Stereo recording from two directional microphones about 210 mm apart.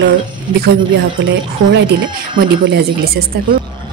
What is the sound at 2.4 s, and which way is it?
Speech, 50° right (ahead or behind).